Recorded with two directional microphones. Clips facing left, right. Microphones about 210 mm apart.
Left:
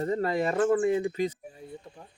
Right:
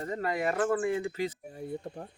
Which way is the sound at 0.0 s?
30° left (ahead or behind).